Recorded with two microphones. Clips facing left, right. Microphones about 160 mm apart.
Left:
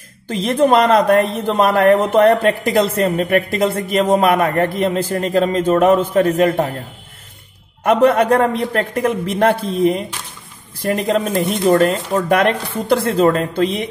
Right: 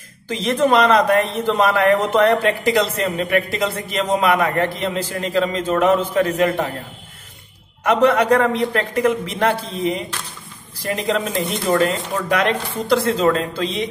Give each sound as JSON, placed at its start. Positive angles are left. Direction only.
{"t": 0.3, "sound": "a man's voice", "side_deg": 50}
{"t": 7.8, "sound": "a man's voice", "side_deg": 55}